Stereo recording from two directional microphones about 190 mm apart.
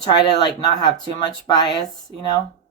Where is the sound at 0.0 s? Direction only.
20° left (ahead or behind).